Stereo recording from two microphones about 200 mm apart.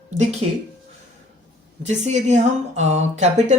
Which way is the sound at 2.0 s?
35° right (ahead or behind).